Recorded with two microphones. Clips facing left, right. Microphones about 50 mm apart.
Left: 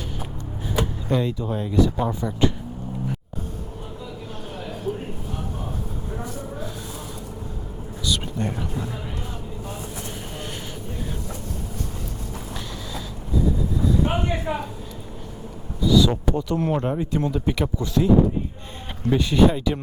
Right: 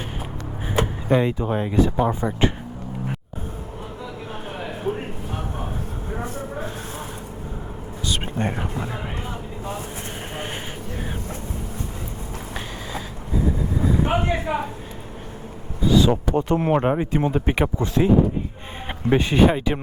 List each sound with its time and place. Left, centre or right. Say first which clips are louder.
0.7 s speech: right 4 dB; right
4.5 s a sound: right 2 dB; right
6.1 s a sound: right 4 dB; right
8.0 s speech: right 1 dB; right
13.7 s vehicle: right 3 dB; right
15.8 s speech: right 1 dB; right
19.1 s speech: right 1 dB; right